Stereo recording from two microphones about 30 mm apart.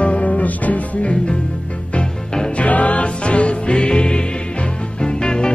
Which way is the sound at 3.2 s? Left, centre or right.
Left.